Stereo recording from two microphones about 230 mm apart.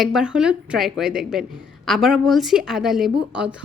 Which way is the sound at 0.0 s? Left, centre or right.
Centre.